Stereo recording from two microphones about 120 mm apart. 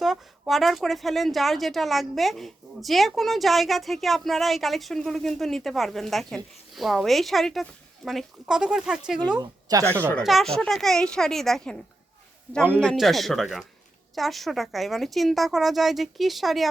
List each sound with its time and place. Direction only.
0.0 s a woman's voice: centre (ahead or behind)
9.4 s a woman's voice: 30° right (ahead or behind)
10.2 s a woman's voice: centre (ahead or behind)
12.5 s speech: 15° right (ahead or behind)
12.8 s a woman's voice: 5° left (ahead or behind)